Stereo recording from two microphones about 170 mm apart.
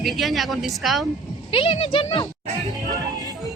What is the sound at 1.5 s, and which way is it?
Speech, 35° left (ahead or behind).